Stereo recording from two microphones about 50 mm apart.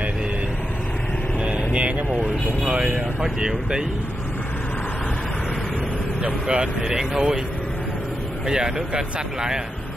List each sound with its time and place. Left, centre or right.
1.4 s vehicle: right
3.2 s speech: centre
6.4 s speech: centre
8.5 s speech: centre